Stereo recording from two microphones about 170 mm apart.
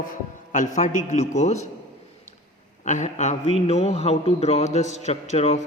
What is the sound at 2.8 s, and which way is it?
A man's voice, 45° left (ahead or behind).